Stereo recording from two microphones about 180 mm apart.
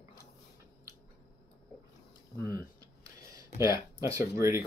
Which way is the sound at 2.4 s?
20° right (ahead or behind).